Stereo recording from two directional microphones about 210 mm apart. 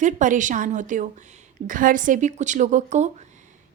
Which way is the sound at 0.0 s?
35° right (ahead or behind).